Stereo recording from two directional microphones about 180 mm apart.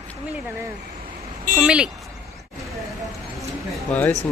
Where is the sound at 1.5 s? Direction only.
5° right (ahead or behind).